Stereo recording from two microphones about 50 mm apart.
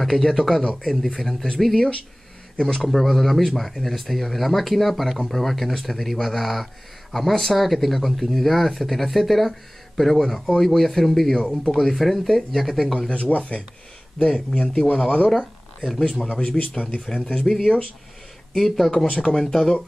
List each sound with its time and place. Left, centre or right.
0.0 s speech: centre
13.1 s speech: left
14.1 s speech: centre
18.5 s speech: centre
19.0 s speech: left
19.3 s speech: centre